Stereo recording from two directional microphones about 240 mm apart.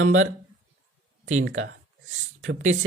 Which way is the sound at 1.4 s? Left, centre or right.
Right.